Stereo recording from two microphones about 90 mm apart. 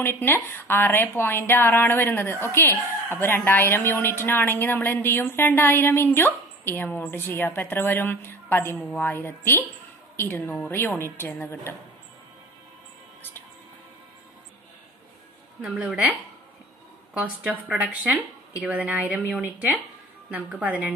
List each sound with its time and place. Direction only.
0.0 s a woman's voice: 25° left (ahead or behind)
15.6 s speech: 15° right (ahead or behind)
17.2 s speech: 15° right (ahead or behind)